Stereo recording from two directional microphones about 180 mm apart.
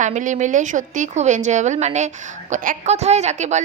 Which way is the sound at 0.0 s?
45° right (ahead or behind).